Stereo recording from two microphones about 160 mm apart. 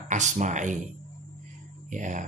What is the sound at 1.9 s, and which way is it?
Speech, 50° right (ahead or behind).